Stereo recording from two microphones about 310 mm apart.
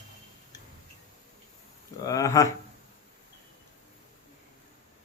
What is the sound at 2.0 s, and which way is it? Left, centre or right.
Speech, centre.